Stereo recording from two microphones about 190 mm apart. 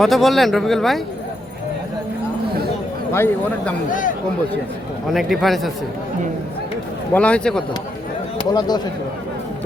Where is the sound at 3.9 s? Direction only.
45° left (ahead or behind).